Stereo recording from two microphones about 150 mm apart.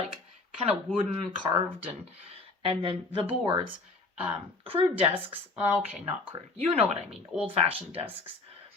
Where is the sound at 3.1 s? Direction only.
35° right (ahead or behind).